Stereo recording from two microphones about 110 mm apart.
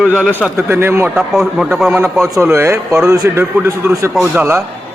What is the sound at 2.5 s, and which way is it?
Speech, 25° right (ahead or behind).